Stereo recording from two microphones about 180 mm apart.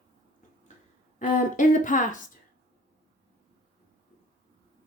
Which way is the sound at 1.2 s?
45° left (ahead or behind).